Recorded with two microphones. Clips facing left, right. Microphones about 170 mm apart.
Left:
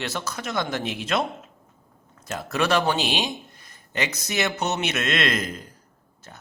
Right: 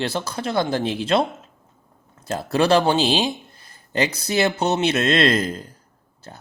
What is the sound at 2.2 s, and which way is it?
A man's voice, 30° right (ahead or behind).